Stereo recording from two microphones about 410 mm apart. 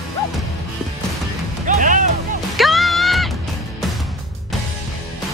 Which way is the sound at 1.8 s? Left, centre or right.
Centre.